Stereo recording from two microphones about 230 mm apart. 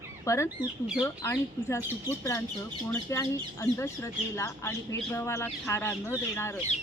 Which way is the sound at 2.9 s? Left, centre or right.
Centre.